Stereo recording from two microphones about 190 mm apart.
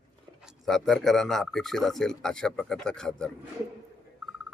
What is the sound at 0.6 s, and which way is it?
Speech, centre (ahead or behind).